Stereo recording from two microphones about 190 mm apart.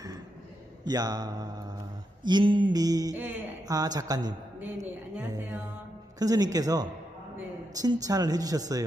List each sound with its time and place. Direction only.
0.8 s speech: 20° right (ahead or behind)
4.6 s a sound: 10° right (ahead or behind)
6.1 s speech: 20° right (ahead or behind)